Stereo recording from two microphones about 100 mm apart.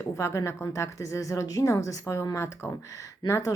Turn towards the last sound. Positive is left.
turn(degrees=30)  # may be behind; listen again after turning